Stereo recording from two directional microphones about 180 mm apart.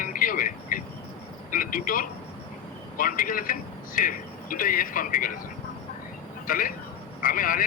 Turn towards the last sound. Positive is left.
turn(degrees=50)  # may be behind; listen again after turning